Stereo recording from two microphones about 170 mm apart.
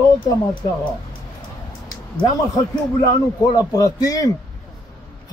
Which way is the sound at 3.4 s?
20° left (ahead or behind).